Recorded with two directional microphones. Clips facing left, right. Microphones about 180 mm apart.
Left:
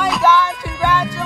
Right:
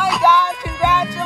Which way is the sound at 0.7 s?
Centre (ahead or behind).